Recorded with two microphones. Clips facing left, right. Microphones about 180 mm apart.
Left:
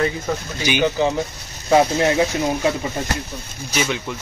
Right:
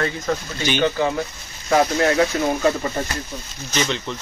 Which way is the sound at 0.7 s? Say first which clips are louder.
Left 1 dB; 10° left (ahead or behind).